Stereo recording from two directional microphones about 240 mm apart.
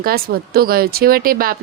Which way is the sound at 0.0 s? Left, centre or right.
Right.